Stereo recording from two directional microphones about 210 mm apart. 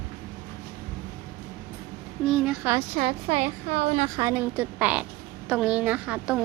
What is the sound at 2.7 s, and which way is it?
A woman's voice, 25° right (ahead or behind).